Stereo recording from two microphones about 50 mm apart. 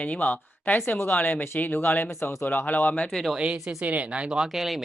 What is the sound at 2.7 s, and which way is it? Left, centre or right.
Speech, left.